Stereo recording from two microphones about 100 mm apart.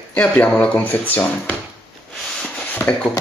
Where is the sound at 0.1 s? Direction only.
10° left (ahead or behind).